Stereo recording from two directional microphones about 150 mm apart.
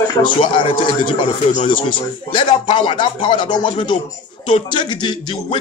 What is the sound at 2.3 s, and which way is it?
Speech, 35° left (ahead or behind).